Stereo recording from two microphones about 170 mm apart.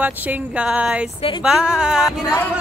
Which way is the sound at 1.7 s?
5° right (ahead or behind).